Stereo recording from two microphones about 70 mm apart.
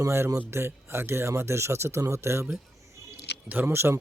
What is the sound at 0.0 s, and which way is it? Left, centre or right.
Speech, right.